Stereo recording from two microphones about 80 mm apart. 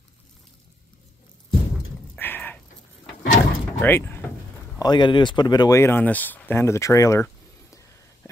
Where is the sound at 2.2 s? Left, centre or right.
Left.